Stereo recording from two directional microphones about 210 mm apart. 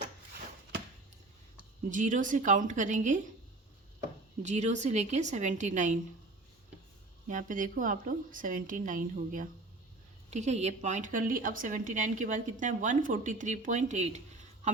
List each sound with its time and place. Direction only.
1.9 s a woman's voice: 40° right (ahead or behind)
4.4 s a woman's voice: 35° right (ahead or behind)
7.3 s a woman's voice: 40° right (ahead or behind)